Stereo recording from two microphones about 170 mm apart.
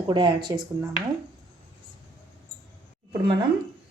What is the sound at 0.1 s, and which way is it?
Speech, 30° right (ahead or behind).